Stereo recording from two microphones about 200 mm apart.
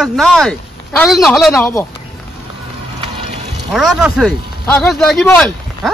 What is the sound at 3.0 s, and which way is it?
Music, 25° right (ahead or behind).